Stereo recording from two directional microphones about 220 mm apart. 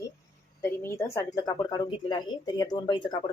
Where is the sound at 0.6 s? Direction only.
10° left (ahead or behind).